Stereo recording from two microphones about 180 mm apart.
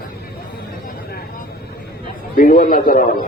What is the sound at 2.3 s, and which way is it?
Speech, 50° left (ahead or behind).